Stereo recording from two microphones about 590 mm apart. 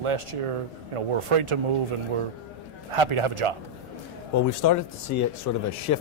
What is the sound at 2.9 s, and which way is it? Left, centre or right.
Speech, right.